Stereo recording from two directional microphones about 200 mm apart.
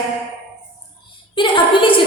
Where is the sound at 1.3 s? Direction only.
25° left (ahead or behind).